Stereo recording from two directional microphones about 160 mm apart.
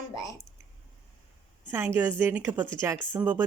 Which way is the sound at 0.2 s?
20° left (ahead or behind).